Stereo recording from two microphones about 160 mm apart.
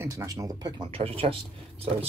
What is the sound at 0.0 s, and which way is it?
Speech, 20° right (ahead or behind).